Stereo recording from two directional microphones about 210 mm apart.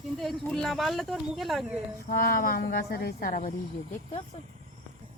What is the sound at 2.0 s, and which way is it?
A woman's voice, 45° left (ahead or behind).